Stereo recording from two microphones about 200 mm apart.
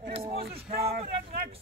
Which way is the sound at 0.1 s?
30° right (ahead or behind).